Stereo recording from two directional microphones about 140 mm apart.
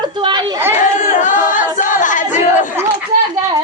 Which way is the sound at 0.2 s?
35° right (ahead or behind).